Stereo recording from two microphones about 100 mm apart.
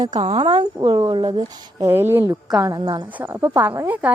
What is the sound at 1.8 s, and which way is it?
Speech, 25° right (ahead or behind).